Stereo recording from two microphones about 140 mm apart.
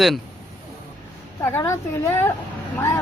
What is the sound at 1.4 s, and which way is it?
A woman's voice, 20° left (ahead or behind).